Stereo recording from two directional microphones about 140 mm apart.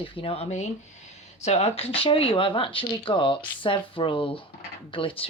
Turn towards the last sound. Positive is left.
turn(degrees=40)  # may be behind; listen again after turning